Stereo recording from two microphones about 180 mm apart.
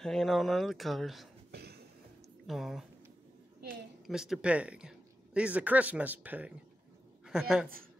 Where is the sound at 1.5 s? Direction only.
65° right (ahead or behind).